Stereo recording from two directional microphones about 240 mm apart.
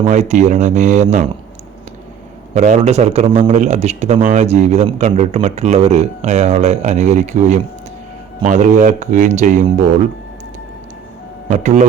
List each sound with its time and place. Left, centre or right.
0.0 s a man's voice: right
2.6 s a man's voice: right
11.4 s speech: right